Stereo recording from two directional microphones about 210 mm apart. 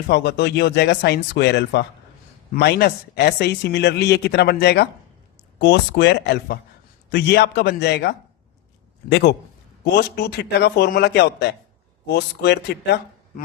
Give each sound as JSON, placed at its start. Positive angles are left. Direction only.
{"t": 0.1, "sound": "a man's voice", "side_deg": 55}